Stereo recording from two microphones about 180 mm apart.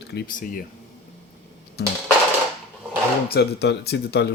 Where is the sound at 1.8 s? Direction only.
65° left (ahead or behind).